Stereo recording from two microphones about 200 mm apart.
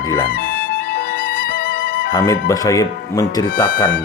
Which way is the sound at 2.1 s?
15° left (ahead or behind).